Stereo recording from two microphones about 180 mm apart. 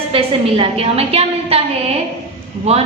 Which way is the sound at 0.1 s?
30° right (ahead or behind).